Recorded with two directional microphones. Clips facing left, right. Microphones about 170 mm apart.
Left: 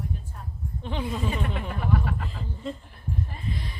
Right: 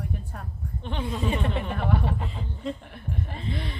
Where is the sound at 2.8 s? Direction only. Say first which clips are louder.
Even; 70° right (ahead or behind).